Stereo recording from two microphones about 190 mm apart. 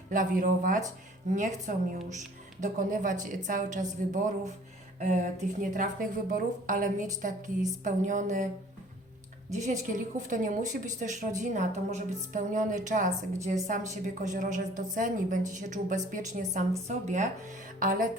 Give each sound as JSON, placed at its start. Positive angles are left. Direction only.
{"t": 0.1, "sound": "a woman's voice", "side_deg": -45}
{"t": 9.5, "sound": "a woman's voice", "side_deg": -40}